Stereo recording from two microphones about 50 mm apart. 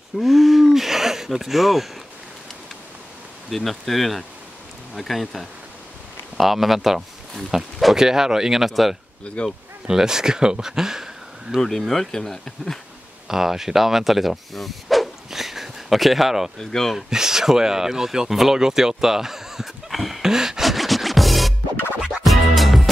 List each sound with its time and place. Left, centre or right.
0.2 s cattle: centre
3.4 s speech: centre
9.2 s speech: left
9.8 s speech: centre
11.5 s speech: centre
13.3 s speech: centre
16.5 s speech: centre
16.9 s a sound: centre
22.2 s music: centre